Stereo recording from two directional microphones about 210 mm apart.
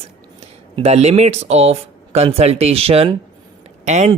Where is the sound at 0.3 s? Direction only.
30° right (ahead or behind).